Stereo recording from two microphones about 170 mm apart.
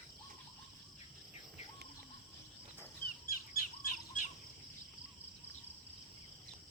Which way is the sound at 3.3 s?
55° left (ahead or behind).